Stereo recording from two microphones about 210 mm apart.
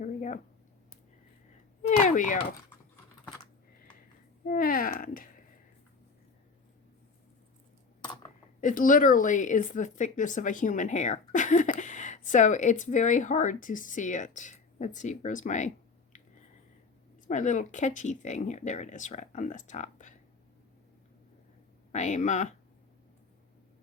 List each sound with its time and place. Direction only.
0.0 s a sound: 35° left (ahead or behind)
2.0 s speech: 40° left (ahead or behind)
4.4 s speech: 40° left (ahead or behind)
8.6 s speech: 40° left (ahead or behind)
17.2 s speech: 35° left (ahead or behind)
21.9 s speech: 35° left (ahead or behind)